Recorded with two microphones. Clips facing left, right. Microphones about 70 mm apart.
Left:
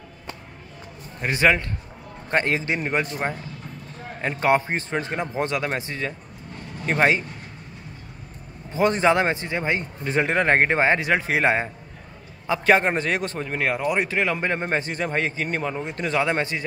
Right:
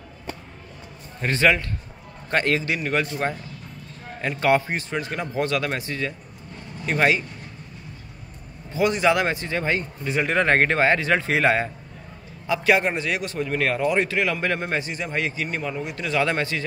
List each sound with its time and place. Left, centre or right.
1.2 s a man's voice: centre
4.2 s a man's voice: left
8.7 s a man's voice: left
10.0 s speech: left
10.3 s a man's voice: centre
12.4 s speech: left
13.5 s speech: left
16.2 s a man's voice: left